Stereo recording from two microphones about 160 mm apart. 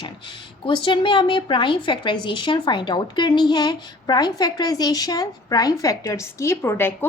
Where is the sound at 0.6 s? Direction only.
30° left (ahead or behind).